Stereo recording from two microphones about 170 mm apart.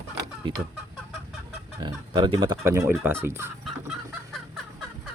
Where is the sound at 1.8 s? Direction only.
25° right (ahead or behind).